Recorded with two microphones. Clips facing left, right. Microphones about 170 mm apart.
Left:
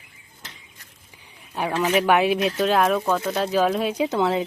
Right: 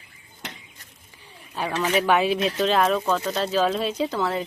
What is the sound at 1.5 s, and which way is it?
Speech, 10° left (ahead or behind).